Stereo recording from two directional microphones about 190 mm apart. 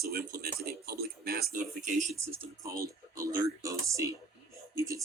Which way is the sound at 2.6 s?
15° right (ahead or behind).